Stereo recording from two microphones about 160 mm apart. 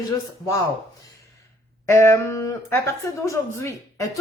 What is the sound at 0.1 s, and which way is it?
Speech, 20° left (ahead or behind).